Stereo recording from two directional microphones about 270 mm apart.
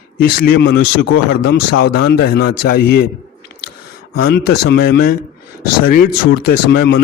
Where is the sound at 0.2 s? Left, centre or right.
Left.